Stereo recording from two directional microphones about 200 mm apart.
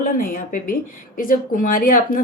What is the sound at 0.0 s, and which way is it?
A woman's voice, 45° left (ahead or behind).